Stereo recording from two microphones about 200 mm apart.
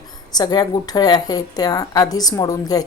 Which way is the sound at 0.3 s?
20° left (ahead or behind).